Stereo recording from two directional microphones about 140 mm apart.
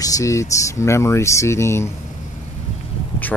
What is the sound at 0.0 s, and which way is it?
Speech, 25° left (ahead or behind).